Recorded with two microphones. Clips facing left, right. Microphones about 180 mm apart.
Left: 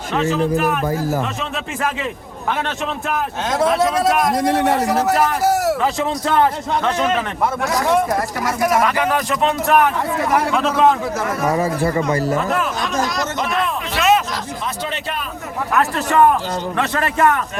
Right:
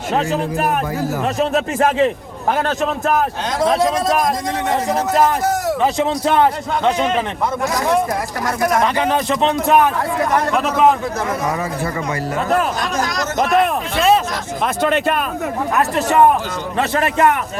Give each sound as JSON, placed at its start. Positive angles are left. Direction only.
{"t": 0.1, "sound": "speech", "side_deg": -40}
{"t": 5.8, "sound": "a man's voice", "side_deg": -20}
{"t": 8.8, "sound": "a man's voice", "side_deg": -25}
{"t": 10.5, "sound": "a man's voice", "side_deg": -10}
{"t": 13.4, "sound": "a man's voice", "side_deg": -45}
{"t": 13.9, "sound": "speech", "side_deg": -30}
{"t": 14.6, "sound": "a man's voice", "side_deg": -55}
{"t": 15.8, "sound": "a man's voice", "side_deg": -20}